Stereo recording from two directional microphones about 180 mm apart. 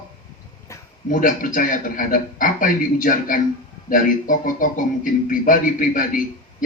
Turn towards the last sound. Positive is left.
turn(degrees=50)  # may be behind; listen again after turning